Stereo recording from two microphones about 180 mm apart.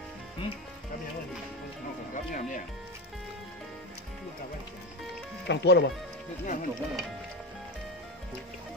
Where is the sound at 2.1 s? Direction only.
45° left (ahead or behind).